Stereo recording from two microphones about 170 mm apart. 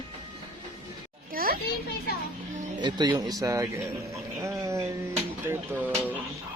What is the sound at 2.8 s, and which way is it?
Speech, 25° right (ahead or behind).